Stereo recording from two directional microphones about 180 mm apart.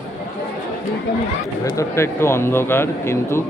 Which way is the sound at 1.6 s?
15° left (ahead or behind).